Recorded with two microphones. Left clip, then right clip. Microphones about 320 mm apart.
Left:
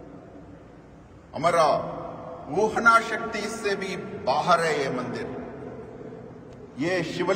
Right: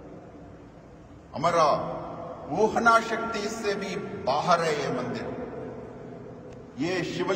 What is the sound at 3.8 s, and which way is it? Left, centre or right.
A man's voice, centre.